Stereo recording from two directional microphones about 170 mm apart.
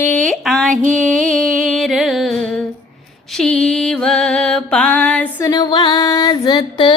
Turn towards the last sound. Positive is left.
turn(degrees=25)  # may be behind; listen again after turning